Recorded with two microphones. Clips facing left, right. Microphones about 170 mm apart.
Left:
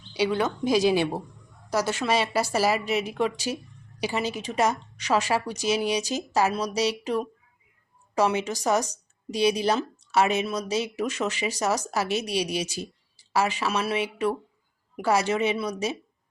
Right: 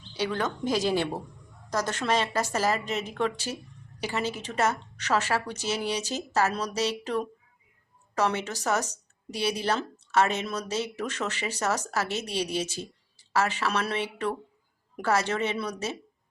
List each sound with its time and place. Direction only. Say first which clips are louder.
0.1 s speech: left 4 dB; 10° left (ahead or behind)